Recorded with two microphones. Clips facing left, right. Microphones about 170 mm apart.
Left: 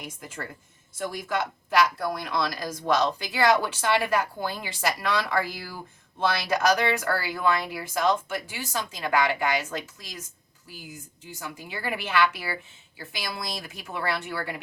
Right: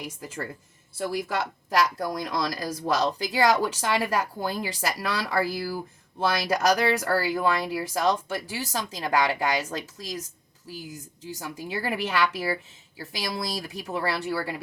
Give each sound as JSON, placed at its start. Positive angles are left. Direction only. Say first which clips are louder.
{"t": 0.0, "sound": "speech", "louder": "right 3 dB", "side_deg": -35}
{"t": 11.3, "sound": "speech", "louder": "right 4 dB", "side_deg": -40}